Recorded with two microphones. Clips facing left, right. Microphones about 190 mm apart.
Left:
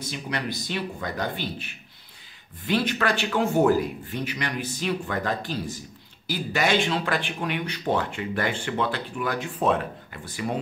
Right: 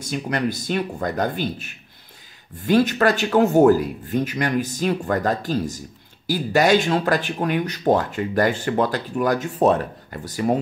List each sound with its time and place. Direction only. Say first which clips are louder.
0.0 s speech: right 7 dB; 45° right (ahead or behind)